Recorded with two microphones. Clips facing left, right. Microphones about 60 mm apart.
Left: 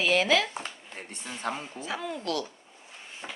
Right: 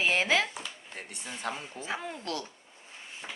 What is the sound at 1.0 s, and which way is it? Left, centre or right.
Speech, left.